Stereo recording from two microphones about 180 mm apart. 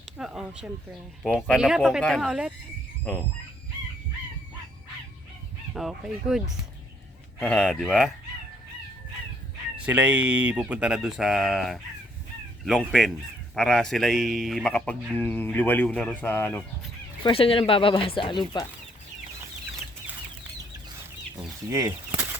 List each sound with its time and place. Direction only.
0.2 s speech: 5° right (ahead or behind)
5.7 s speech: centre (ahead or behind)
9.8 s speech: 10° right (ahead or behind)
13.6 s speech: 5° left (ahead or behind)
17.2 s speech: 30° left (ahead or behind)
21.7 s a sound: 15° right (ahead or behind)